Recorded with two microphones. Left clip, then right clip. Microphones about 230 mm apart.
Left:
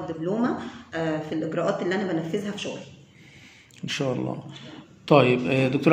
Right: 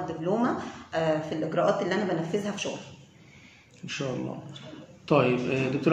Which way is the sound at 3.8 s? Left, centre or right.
Left.